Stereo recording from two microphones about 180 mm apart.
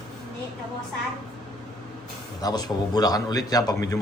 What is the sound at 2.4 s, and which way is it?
A man's voice, 20° left (ahead or behind).